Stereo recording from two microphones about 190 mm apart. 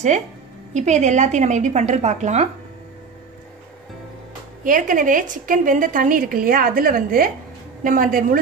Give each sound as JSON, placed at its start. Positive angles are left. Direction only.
{"t": 0.7, "sound": "a woman's voice", "side_deg": -40}
{"t": 4.6, "sound": "a woman's voice", "side_deg": -45}